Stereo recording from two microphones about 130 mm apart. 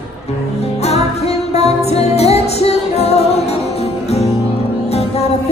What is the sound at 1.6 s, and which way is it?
Music, 55° left (ahead or behind).